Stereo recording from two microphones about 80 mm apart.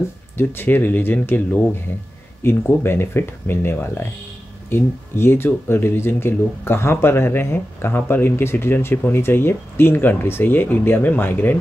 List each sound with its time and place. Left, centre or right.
0.4 s speech: left